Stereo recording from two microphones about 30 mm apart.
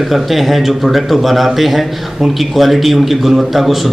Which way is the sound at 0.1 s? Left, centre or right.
Centre.